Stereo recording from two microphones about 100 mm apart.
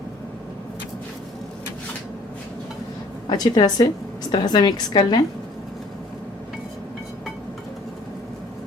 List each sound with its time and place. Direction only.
3.2 s a woman's voice: 45° left (ahead or behind)